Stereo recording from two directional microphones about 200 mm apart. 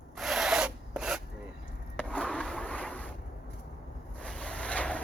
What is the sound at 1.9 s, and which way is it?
Skateboard, 5° left (ahead or behind).